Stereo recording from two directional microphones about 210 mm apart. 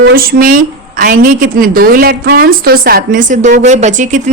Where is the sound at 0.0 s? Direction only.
45° right (ahead or behind).